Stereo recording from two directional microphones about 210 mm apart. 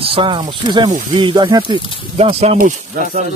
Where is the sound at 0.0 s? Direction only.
25° right (ahead or behind).